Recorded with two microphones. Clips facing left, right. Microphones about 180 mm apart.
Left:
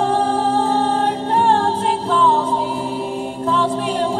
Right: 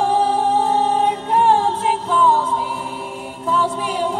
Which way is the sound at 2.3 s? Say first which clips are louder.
Left 1 dB; 30° left (ahead or behind).